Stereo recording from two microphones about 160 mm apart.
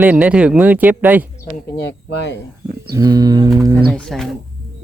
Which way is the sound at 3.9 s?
5° left (ahead or behind).